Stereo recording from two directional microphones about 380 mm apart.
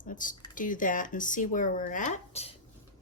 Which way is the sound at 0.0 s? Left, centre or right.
Left.